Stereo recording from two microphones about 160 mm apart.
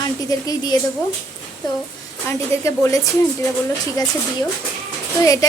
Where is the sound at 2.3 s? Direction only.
20° left (ahead or behind).